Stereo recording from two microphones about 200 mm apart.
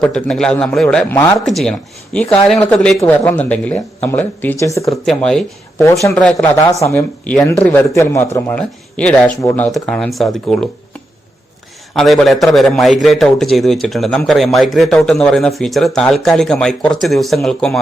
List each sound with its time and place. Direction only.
0.0 s a man's voice: 5° left (ahead or behind)
4.9 s a man's voice: centre (ahead or behind)
5.8 s a man's voice: 15° left (ahead or behind)
11.9 s a man's voice: centre (ahead or behind)